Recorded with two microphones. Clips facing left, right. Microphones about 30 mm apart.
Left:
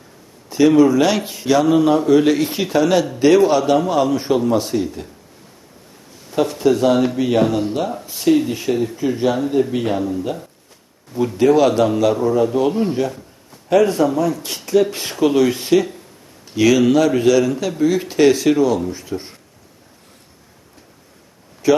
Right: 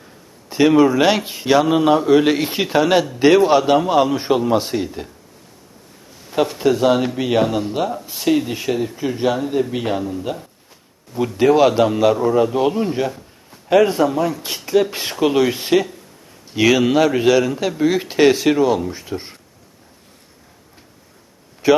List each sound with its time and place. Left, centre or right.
0.5 s speech: right
6.3 s speech: centre
11.3 s speech: centre
21.6 s speech: right